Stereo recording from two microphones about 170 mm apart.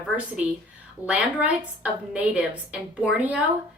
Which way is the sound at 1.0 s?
10° right (ahead or behind).